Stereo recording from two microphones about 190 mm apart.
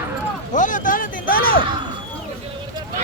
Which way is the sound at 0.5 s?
45° left (ahead or behind).